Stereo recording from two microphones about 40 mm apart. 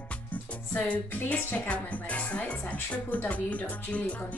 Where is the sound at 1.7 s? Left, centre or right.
Left.